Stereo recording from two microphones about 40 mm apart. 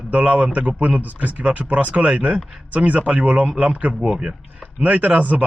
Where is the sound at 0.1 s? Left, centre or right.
Right.